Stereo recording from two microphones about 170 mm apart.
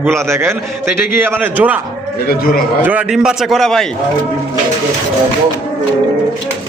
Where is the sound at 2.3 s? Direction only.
60° left (ahead or behind).